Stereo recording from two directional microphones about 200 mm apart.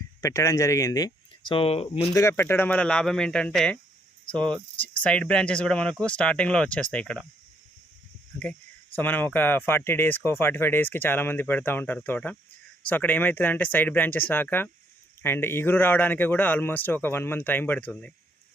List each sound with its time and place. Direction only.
0.2 s speech: 15° left (ahead or behind)
2.1 s speech: 15° left (ahead or behind)
4.8 s speech: 5° left (ahead or behind)
9.0 s speech: 10° left (ahead or behind)